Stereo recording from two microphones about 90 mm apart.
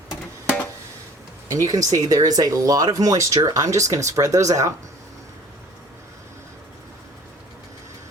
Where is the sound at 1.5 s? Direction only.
40° right (ahead or behind).